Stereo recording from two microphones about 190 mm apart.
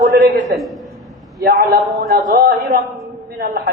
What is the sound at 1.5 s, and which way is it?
A man's voice, 50° right (ahead or behind).